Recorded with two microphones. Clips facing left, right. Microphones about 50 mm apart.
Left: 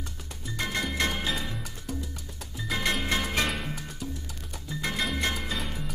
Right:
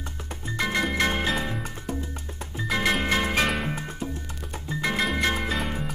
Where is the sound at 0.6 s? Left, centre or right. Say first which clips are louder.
Right 5 dB; right.